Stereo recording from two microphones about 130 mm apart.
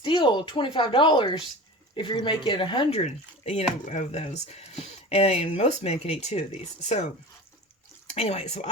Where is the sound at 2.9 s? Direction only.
55° left (ahead or behind).